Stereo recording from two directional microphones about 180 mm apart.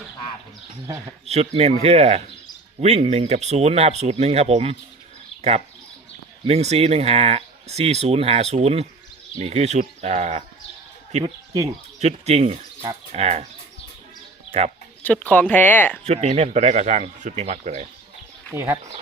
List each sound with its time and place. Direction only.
0.9 s speech: 15° right (ahead or behind)
1.2 s speech: 35° right (ahead or behind)
11.2 s speech: 20° right (ahead or behind)
11.9 s speech: 35° right (ahead or behind)
15.0 s speech: 10° left (ahead or behind)
16.0 s speech: 35° right (ahead or behind)
18.5 s speech: 15° right (ahead or behind)